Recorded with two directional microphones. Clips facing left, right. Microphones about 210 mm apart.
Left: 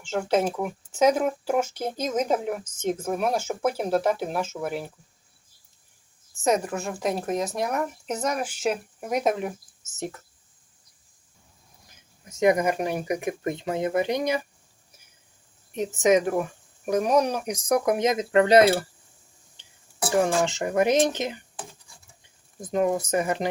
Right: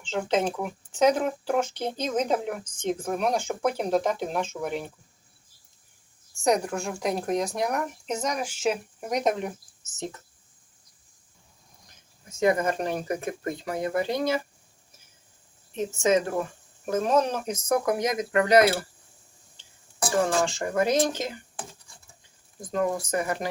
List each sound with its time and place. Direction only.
0.0 s speech: 10° left (ahead or behind)
6.3 s speech: centre (ahead or behind)
12.3 s speech: 20° left (ahead or behind)
15.7 s speech: 15° left (ahead or behind)
19.5 s music: 15° left (ahead or behind)
20.4 s speech: 20° left (ahead or behind)
22.6 s speech: 20° left (ahead or behind)